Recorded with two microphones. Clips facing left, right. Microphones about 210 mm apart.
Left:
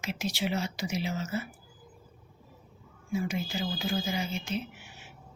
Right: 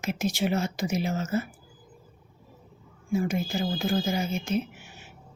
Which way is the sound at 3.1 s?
45° right (ahead or behind).